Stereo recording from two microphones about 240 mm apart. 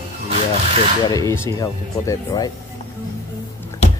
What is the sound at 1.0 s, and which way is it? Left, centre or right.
Speech, centre.